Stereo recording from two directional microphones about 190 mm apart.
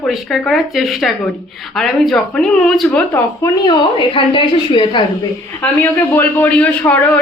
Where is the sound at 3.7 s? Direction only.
25° left (ahead or behind).